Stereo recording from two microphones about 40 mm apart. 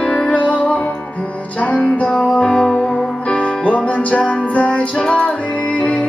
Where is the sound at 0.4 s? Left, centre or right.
Left.